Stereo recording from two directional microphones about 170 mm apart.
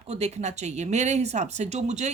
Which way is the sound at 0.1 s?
40° right (ahead or behind).